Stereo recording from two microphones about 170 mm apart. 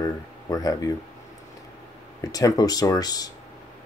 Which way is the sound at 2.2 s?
20° left (ahead or behind).